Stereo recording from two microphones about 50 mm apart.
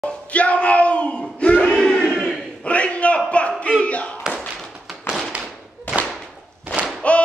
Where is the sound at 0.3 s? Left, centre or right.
Left.